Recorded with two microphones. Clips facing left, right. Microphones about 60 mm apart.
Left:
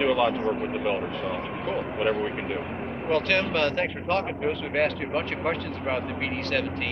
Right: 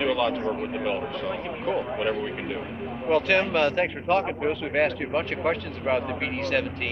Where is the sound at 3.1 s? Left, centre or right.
Centre.